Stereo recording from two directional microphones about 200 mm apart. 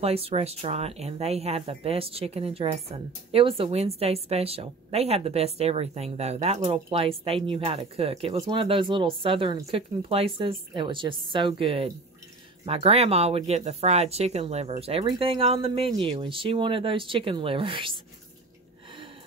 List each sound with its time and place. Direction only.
0.0 s speech: 30° right (ahead or behind)